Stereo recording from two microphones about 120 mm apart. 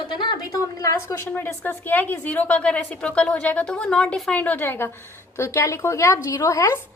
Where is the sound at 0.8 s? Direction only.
25° left (ahead or behind).